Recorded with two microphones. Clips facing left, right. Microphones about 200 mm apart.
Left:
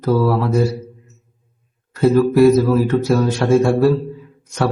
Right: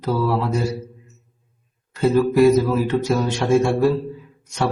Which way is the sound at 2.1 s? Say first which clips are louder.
Left 3 dB; 15° right (ahead or behind).